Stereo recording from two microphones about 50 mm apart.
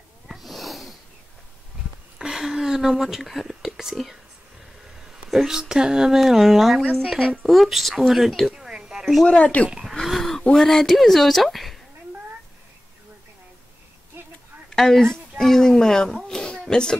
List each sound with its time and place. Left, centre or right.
0.3 s snort: centre
2.1 s speech: centre
5.1 s speech: centre
7.2 s speech: centre
7.5 s a woman's voice: centre
8.5 s a sound: centre
9.0 s speech: centre
9.3 s speech: left
10.0 s a sound: centre
10.5 s a woman's voice: centre
14.2 s a sound: right
14.7 s speech: centre